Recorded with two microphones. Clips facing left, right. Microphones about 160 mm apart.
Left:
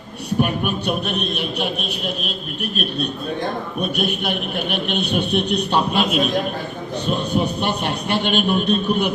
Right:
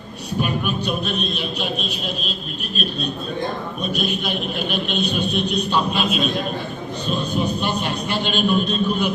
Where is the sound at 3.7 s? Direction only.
60° left (ahead or behind).